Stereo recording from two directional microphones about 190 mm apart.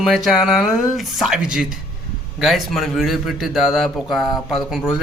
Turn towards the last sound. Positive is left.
turn(degrees=0)  # may be behind; listen again after turning